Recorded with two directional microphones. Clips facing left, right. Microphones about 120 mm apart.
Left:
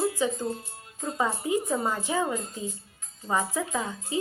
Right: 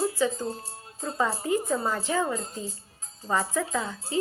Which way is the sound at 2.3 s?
35° right (ahead or behind).